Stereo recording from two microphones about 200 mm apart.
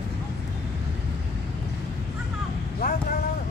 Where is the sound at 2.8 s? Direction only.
50° left (ahead or behind).